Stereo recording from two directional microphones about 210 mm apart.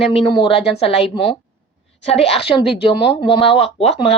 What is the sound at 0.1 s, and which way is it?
A woman's voice, 25° left (ahead or behind).